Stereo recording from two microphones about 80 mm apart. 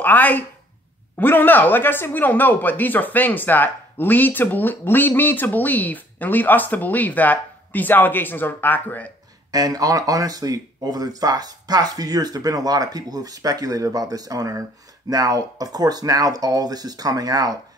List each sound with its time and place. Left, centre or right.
0.0 s speech: left
9.5 s speech: right